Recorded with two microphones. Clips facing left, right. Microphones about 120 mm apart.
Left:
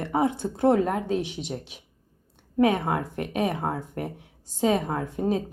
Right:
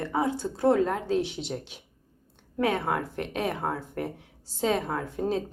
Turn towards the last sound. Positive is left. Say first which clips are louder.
# left 2 dB
turn(degrees=10)  # may be behind; listen again after turning